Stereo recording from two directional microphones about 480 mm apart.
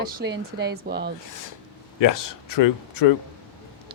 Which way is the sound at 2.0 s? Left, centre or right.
Left.